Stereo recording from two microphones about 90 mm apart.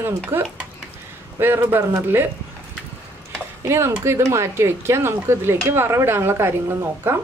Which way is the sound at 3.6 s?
30° right (ahead or behind).